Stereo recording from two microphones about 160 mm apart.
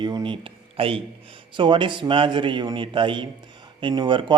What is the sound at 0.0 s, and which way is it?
A man's voice, 25° right (ahead or behind).